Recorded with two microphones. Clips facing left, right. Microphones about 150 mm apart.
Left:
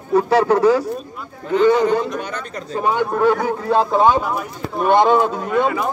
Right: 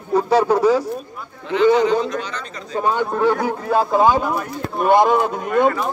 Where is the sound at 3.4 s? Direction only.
5° right (ahead or behind).